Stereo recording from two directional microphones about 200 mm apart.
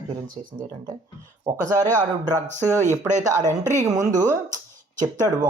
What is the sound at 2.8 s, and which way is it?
Speech, 35° right (ahead or behind).